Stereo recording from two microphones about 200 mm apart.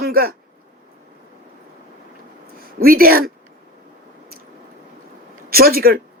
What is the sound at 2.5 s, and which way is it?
Speech, 45° right (ahead or behind).